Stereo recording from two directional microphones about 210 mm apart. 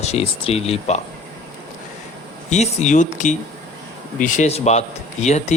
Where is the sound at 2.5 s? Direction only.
35° left (ahead or behind).